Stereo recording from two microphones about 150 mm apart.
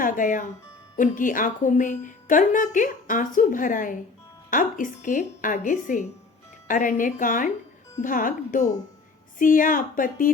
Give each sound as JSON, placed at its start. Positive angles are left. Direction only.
{"t": 0.0, "sound": "a woman's voice", "side_deg": 60}